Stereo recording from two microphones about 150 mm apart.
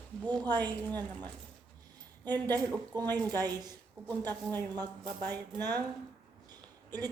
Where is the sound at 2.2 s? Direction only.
30° right (ahead or behind).